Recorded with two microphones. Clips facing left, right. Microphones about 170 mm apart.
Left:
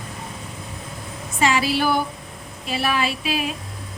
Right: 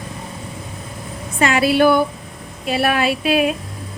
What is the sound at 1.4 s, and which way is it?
A woman's voice, 55° right (ahead or behind).